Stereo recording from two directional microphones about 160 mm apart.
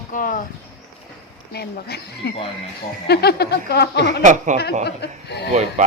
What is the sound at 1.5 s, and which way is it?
Speech, 90° left.